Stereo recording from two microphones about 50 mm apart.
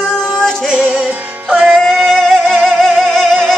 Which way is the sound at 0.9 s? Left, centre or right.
Right.